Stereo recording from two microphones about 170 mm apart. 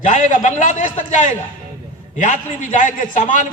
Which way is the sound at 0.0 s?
50° left (ahead or behind).